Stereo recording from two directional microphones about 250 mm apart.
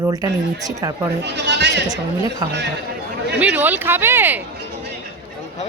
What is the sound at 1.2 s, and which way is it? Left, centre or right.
Speech, right.